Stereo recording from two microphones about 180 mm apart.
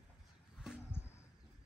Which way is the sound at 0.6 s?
5° right (ahead or behind).